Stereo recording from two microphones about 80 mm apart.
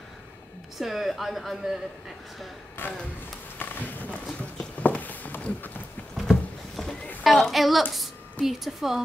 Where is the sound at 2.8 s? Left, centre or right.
Left.